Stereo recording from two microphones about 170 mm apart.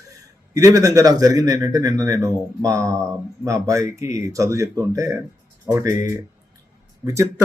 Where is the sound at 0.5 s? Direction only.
20° right (ahead or behind).